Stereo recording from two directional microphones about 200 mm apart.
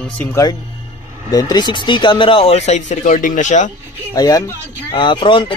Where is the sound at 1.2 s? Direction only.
20° left (ahead or behind); by 3.7 s 35° left (ahead or behind).